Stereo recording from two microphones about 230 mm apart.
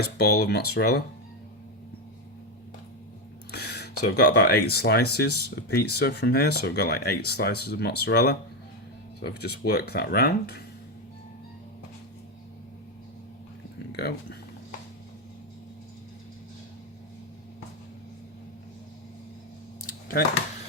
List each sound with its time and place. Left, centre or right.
0.0 s speech: left
3.5 s a sound: left
4.0 s speech: left
13.9 s speech: left
19.8 s computer keyboard: left